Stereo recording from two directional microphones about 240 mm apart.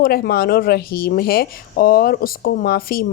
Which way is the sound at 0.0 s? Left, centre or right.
Left.